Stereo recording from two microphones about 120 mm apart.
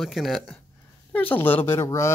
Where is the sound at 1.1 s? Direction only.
15° left (ahead or behind).